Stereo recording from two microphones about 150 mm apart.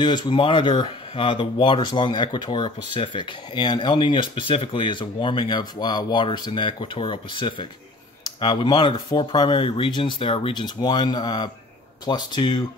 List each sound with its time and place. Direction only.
0.0 s speech: 30° left (ahead or behind)